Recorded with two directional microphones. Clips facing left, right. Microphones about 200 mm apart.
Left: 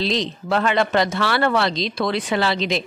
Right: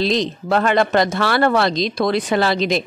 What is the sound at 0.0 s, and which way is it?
A woman's voice, 45° right (ahead or behind).